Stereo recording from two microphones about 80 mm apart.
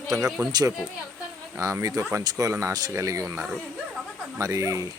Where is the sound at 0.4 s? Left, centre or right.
Right.